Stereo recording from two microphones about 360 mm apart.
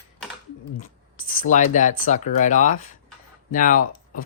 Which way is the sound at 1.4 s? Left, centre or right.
Left.